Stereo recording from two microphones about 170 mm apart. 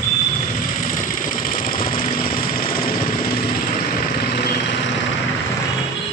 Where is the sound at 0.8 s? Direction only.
50° left (ahead or behind).